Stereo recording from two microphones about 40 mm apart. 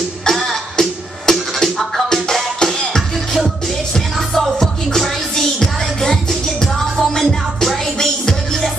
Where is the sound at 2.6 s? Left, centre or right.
Centre.